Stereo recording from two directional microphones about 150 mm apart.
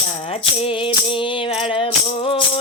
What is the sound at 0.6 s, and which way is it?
Music, 35° left (ahead or behind).